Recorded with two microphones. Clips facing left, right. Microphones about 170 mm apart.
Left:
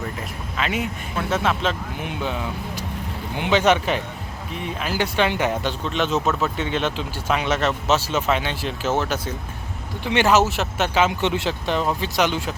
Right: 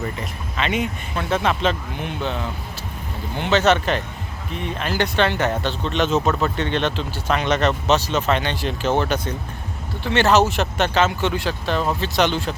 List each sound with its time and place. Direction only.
0.0 s speech: centre (ahead or behind)
11.2 s speech: 20° left (ahead or behind)